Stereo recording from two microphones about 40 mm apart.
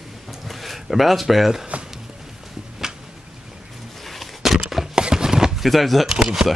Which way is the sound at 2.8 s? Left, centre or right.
Centre.